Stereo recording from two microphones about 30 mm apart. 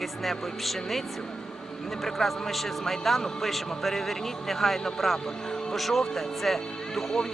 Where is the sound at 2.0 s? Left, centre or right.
Centre.